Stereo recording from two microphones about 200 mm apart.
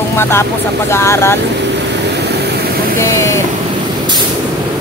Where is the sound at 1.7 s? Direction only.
60° right (ahead or behind).